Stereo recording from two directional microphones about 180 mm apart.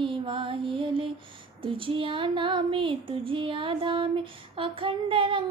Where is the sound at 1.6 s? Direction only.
30° right (ahead or behind).